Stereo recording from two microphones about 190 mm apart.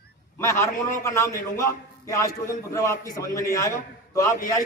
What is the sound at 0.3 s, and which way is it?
A man's voice, 15° left (ahead or behind).